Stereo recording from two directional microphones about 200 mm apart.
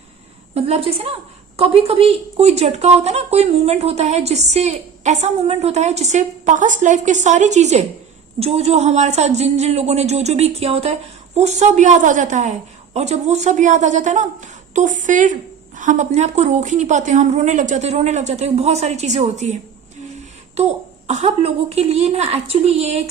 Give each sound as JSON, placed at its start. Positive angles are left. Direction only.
{"t": 0.5, "sound": "a woman's voice", "side_deg": -30}
{"t": 20.6, "sound": "a woman's voice", "side_deg": -35}